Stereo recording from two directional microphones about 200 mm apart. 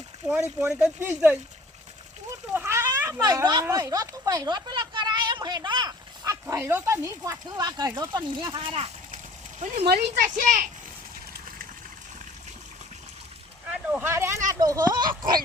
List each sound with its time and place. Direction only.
0.2 s speech: 5° right (ahead or behind)
2.5 s speech: 10° right (ahead or behind)
6.4 s speech: 10° right (ahead or behind); by 9.8 s 35° right (ahead or behind)
9.8 s speech: 50° right (ahead or behind)
13.7 s speech: 10° right (ahead or behind)